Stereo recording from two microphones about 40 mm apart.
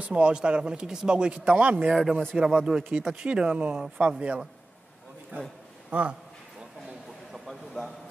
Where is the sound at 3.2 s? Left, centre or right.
Right.